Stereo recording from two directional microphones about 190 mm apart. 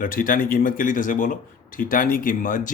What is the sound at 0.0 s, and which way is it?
Speech, 45° left (ahead or behind).